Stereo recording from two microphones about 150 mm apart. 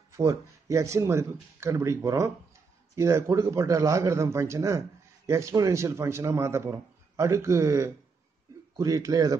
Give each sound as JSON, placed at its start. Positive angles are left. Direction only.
{"t": 0.1, "sound": "a man's voice", "side_deg": -20}